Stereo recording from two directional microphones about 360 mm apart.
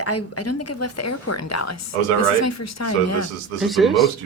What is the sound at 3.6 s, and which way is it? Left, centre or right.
Speech, centre.